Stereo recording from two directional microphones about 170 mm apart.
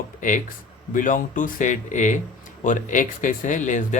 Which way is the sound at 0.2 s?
50° left (ahead or behind).